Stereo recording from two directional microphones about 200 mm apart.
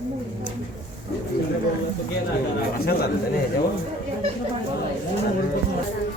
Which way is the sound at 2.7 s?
50° left (ahead or behind).